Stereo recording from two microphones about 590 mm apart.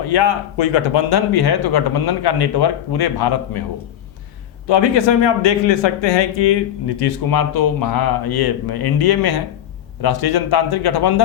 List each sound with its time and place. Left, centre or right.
0.0 s speech: left
4.6 s speech: left